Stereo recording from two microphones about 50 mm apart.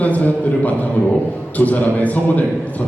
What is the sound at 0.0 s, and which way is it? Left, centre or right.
A man's voice, left.